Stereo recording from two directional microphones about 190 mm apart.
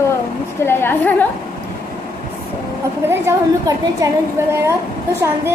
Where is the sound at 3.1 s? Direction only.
15° right (ahead or behind).